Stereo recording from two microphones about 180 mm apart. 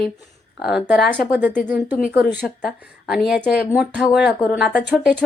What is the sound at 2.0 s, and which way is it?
Speech, 55° left (ahead or behind).